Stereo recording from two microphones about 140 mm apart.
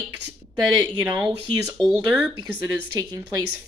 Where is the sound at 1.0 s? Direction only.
10° right (ahead or behind).